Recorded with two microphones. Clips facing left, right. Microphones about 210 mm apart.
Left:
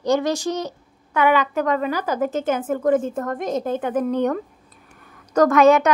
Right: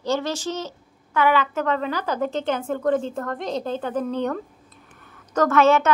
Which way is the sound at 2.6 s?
15° left (ahead or behind).